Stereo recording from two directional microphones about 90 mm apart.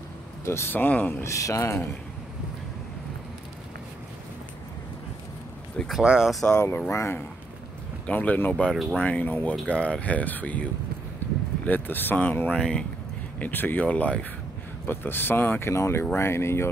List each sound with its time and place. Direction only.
0.5 s speech: 25° left (ahead or behind)
1.2 s speech: 35° left (ahead or behind)
5.8 s speech: centre (ahead or behind)
6.5 s speech: 30° left (ahead or behind)
8.1 s speech: 15° left (ahead or behind)
13.4 s speech: 20° left (ahead or behind)